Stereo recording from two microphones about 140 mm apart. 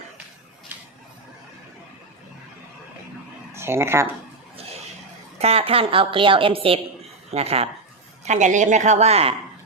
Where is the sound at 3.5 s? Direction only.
20° right (ahead or behind).